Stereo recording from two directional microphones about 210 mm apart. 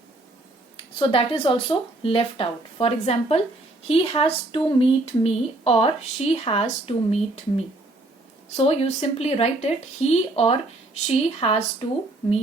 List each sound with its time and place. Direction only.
0.9 s speech: 25° left (ahead or behind)